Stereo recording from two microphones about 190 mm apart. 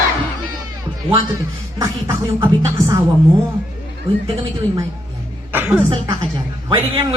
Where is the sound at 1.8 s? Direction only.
15° right (ahead or behind).